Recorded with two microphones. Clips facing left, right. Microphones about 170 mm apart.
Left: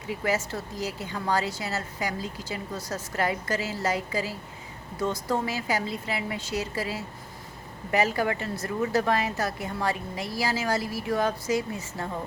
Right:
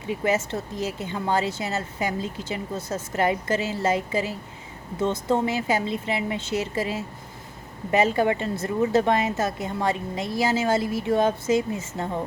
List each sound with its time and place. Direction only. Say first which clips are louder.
0.1 s a woman's voice: right 4 dB; 25° right (ahead or behind)